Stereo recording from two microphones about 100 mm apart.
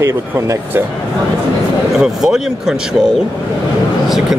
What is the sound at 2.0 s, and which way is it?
Speech, 5° right (ahead or behind).